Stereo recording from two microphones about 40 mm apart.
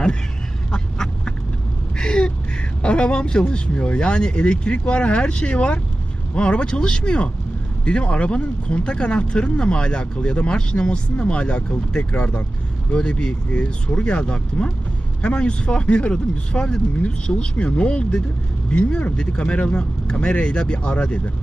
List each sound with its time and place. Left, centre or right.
0.7 s duck: centre
2.0 s speech: left